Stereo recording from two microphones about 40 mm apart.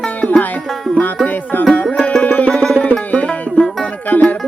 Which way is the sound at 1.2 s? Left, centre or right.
Left.